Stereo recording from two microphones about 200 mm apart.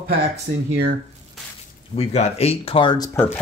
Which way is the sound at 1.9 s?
30° left (ahead or behind).